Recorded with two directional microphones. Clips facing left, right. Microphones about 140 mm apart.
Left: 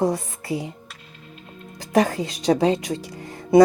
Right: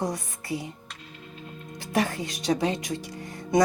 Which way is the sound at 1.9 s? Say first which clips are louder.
Left 7 dB; 35° left (ahead or behind).